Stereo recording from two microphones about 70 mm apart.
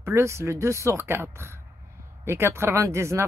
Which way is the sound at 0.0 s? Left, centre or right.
Right.